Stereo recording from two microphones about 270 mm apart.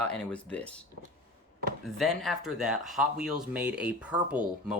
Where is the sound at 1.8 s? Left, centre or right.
Centre.